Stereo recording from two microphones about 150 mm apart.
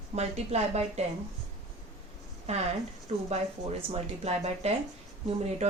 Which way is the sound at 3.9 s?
45° right (ahead or behind).